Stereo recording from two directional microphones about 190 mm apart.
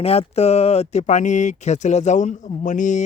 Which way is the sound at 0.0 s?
30° left (ahead or behind).